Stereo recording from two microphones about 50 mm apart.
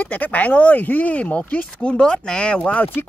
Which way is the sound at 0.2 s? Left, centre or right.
Left.